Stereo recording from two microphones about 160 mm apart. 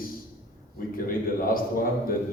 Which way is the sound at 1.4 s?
60° left (ahead or behind).